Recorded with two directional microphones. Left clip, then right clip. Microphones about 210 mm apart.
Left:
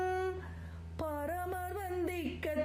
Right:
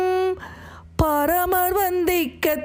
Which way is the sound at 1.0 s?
45° right (ahead or behind).